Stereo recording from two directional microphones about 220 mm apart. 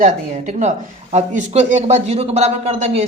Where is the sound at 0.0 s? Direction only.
30° right (ahead or behind).